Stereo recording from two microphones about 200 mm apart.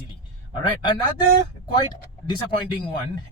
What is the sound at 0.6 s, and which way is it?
Speech, 20° left (ahead or behind).